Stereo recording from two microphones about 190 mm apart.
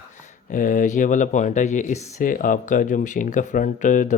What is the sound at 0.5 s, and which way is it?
Speech, 45° left (ahead or behind).